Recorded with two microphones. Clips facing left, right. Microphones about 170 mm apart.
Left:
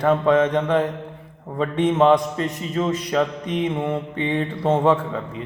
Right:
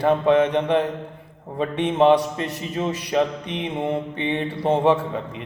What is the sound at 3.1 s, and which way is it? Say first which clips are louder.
A man's voice: even; 20° right (ahead or behind).